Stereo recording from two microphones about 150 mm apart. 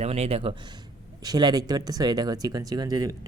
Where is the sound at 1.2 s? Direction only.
25° right (ahead or behind).